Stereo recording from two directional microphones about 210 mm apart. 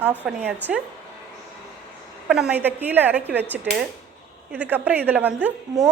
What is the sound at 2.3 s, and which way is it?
A woman's voice, 5° right (ahead or behind).